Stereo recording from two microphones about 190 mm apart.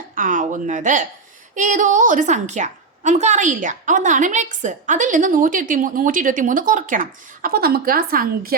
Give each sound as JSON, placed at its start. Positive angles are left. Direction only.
{"t": 0.2, "sound": "a woman's voice", "side_deg": -45}